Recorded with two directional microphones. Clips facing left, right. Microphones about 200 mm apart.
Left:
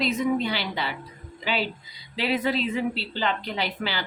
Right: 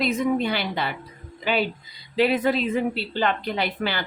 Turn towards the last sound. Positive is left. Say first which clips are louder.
# right 3 dB
turn(degrees=-55)  # may be behind; listen again after turning